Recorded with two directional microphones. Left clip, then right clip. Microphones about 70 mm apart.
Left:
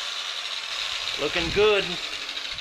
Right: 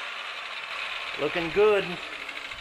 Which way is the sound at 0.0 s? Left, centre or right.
Left.